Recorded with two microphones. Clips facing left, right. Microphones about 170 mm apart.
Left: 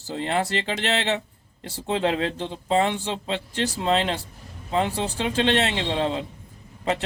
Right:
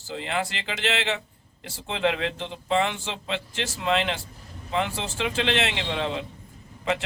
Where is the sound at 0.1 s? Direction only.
40° left (ahead or behind).